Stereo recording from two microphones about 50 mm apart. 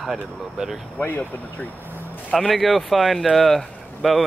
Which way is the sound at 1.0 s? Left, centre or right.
Left.